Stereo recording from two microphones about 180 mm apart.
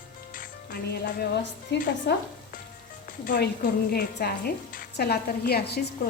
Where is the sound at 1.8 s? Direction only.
50° left (ahead or behind).